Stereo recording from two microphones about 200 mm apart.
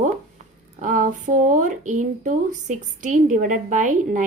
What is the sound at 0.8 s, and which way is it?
A woman's voice, 40° right (ahead or behind).